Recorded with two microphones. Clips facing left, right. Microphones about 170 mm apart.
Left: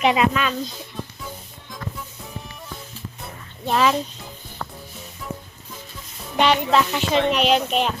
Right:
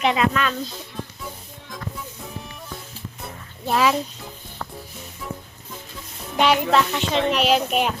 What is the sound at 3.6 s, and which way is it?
Speech, 5° right (ahead or behind).